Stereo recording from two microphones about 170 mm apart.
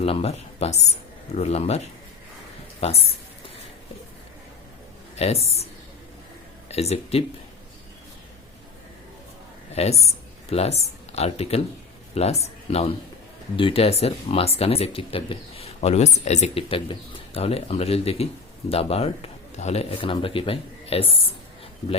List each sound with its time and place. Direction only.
0.0 s speech: 35° left (ahead or behind)
2.8 s speech: 40° left (ahead or behind)
5.1 s speech: 40° left (ahead or behind)
6.7 s speech: 40° left (ahead or behind)
9.7 s speech: 40° left (ahead or behind)